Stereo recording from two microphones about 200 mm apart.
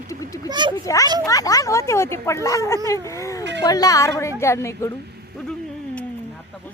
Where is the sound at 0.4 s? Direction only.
20° right (ahead or behind).